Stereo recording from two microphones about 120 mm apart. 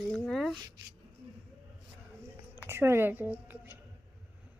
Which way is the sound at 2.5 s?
20° right (ahead or behind).